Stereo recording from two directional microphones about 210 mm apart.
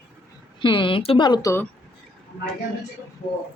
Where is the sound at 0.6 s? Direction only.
25° left (ahead or behind).